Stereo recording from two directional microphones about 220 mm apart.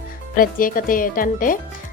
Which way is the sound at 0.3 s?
40° left (ahead or behind).